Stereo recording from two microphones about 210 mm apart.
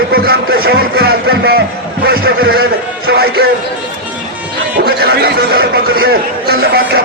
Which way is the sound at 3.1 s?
50° right (ahead or behind).